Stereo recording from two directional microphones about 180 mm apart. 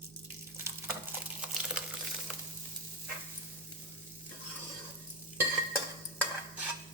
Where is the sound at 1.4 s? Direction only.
5° right (ahead or behind).